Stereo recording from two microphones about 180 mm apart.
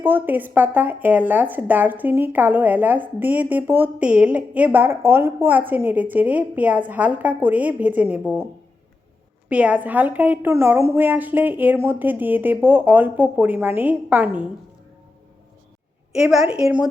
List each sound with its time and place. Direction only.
0.0 s speech: 10° right (ahead or behind)
9.5 s speech: 10° right (ahead or behind)
16.1 s a woman's voice: 5° right (ahead or behind)